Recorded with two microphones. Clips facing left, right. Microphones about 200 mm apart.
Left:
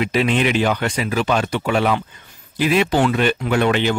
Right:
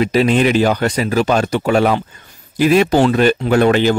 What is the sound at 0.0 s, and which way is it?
Speech, 40° right (ahead or behind).